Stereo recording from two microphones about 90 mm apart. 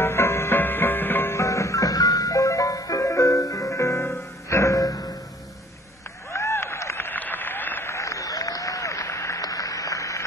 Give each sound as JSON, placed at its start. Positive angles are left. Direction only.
{"t": 0.0, "sound": "music", "side_deg": 30}
{"t": 6.3, "sound": "applause", "side_deg": 30}